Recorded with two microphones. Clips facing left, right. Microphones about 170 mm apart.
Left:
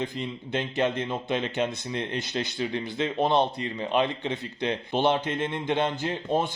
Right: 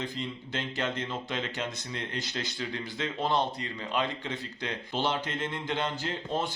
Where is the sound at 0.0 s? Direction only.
20° left (ahead or behind).